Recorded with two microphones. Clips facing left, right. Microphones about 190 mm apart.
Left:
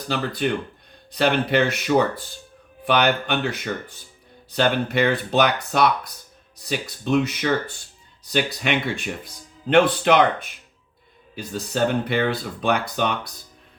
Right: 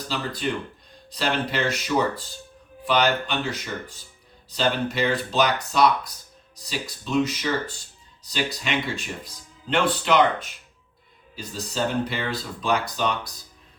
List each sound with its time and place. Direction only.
1.1 s speech: 60° left (ahead or behind)